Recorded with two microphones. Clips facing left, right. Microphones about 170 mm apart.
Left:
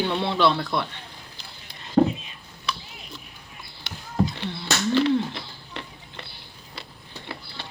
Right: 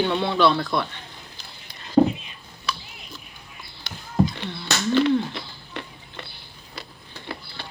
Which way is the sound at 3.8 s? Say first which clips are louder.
Right 3 dB; 25° left (ahead or behind).